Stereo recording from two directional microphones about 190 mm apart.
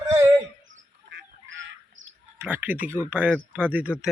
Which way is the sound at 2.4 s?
10° right (ahead or behind).